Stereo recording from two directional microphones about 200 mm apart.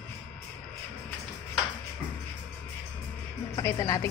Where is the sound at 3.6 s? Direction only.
15° left (ahead or behind).